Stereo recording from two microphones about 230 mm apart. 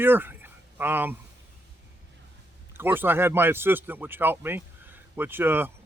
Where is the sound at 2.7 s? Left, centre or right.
Centre.